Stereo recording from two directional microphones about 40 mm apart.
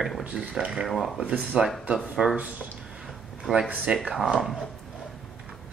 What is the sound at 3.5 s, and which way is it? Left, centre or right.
Speech, right.